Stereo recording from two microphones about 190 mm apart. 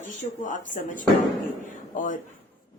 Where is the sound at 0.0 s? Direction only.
45° left (ahead or behind).